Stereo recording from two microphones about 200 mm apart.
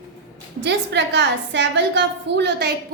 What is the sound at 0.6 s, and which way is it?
A woman's voice, 60° right (ahead or behind).